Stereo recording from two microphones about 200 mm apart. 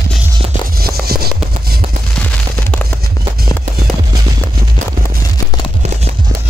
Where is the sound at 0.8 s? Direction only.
50° right (ahead or behind).